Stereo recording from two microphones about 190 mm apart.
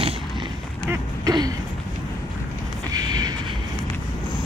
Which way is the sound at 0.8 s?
20° right (ahead or behind).